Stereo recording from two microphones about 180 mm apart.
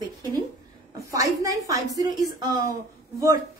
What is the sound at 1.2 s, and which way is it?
A woman's voice, 20° right (ahead or behind).